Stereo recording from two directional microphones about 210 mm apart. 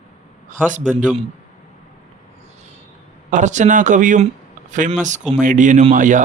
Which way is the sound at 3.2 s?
35° right (ahead or behind).